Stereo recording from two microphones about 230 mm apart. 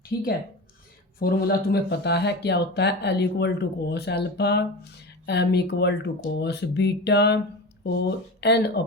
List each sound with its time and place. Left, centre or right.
0.0 s speech: left